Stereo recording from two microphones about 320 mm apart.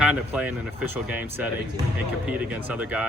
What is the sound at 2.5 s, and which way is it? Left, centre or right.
Speech, centre.